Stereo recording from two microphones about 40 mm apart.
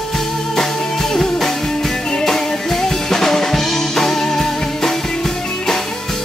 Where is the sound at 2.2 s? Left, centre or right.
Centre.